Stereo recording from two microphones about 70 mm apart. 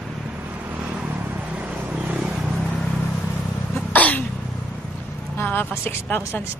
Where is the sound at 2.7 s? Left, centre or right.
Centre.